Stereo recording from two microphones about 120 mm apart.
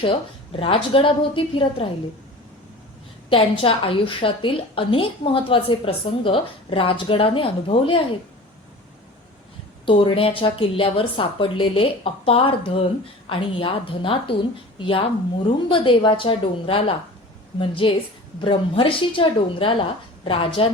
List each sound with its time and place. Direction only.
0.0 s a woman's voice: 50° left (ahead or behind)
3.2 s a woman's voice: 50° left (ahead or behind)
9.8 s a woman's voice: 45° left (ahead or behind)